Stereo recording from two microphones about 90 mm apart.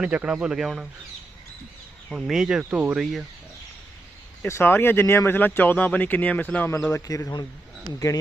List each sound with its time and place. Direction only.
0.0 s speech: 10° right (ahead or behind)
2.1 s speech: 5° right (ahead or behind)
3.0 s speech: 5° right (ahead or behind)
4.4 s speech: 25° left (ahead or behind)
6.9 s a man's voice: 35° left (ahead or behind)